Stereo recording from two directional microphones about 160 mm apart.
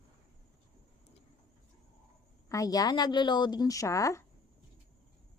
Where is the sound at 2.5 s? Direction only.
20° left (ahead or behind).